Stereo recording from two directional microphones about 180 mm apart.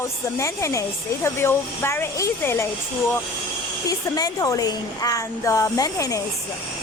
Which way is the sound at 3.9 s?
20° left (ahead or behind).